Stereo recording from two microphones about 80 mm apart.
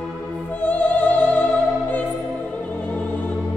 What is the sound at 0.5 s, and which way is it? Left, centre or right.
Opera, centre.